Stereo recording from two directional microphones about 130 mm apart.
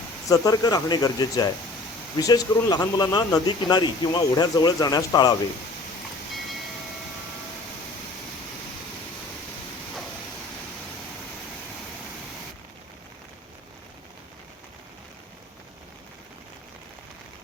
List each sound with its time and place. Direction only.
0.3 s speech: 30° left (ahead or behind)